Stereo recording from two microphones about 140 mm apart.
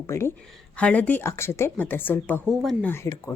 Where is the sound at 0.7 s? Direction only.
10° left (ahead or behind).